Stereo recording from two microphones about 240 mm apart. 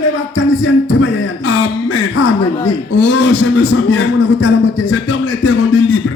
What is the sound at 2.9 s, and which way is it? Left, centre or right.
Music, left.